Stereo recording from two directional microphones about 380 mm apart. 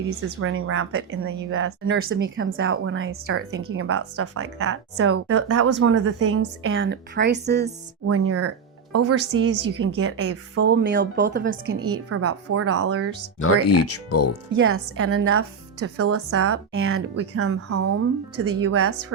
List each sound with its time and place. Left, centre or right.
0.3 s a woman's voice: right
8.0 s a woman's voice: right
13.4 s speech: left
14.5 s a woman's voice: right